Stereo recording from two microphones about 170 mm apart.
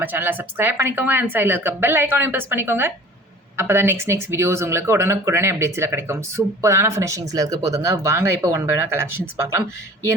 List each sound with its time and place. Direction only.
0.0 s speech: 10° right (ahead or behind)